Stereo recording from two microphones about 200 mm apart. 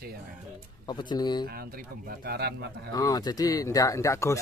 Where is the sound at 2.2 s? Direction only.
55° right (ahead or behind).